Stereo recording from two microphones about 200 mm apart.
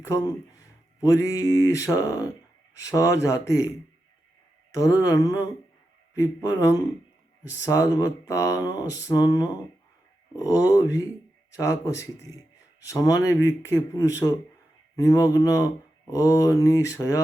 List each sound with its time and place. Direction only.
0.0 s speech: 15° left (ahead or behind)
4.7 s speech: 15° left (ahead or behind)